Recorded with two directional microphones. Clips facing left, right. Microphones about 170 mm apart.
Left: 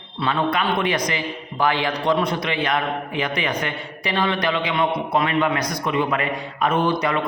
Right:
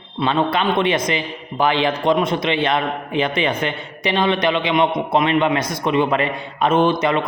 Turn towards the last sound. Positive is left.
turn(degrees=-20)  # may be behind; listen again after turning